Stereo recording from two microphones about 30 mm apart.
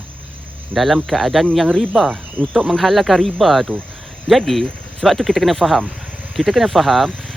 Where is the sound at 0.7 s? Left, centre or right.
Right.